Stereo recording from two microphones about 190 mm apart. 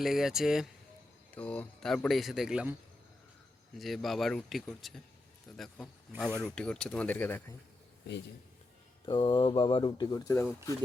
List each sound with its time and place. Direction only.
0.0 s speech: centre (ahead or behind)
3.8 s speech: centre (ahead or behind)
9.0 s speech: 25° left (ahead or behind)